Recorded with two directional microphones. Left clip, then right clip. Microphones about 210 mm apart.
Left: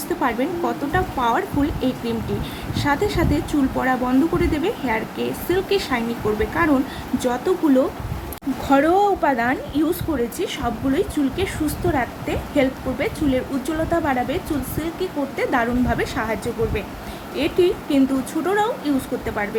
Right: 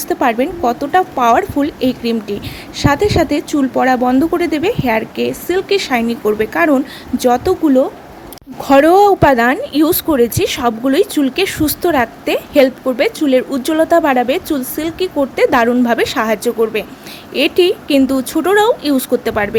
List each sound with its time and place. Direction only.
0.2 s a woman's voice: 40° right (ahead or behind)